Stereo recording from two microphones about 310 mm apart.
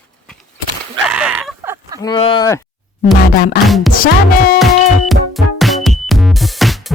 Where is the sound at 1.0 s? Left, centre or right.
Centre.